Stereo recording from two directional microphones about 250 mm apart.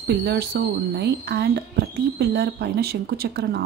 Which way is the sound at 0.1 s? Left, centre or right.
Right.